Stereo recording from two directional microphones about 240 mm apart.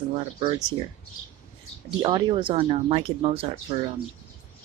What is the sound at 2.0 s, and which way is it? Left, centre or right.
Speech, centre.